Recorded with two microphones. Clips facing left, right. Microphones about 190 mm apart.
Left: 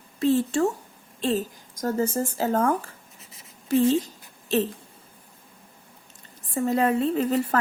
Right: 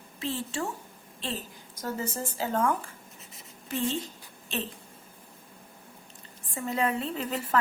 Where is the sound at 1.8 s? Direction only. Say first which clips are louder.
Left 8 dB; 45° left (ahead or behind).